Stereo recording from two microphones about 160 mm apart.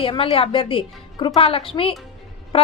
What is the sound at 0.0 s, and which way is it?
A woman's voice, 35° left (ahead or behind).